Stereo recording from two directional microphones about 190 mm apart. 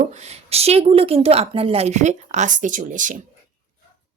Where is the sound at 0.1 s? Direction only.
35° right (ahead or behind).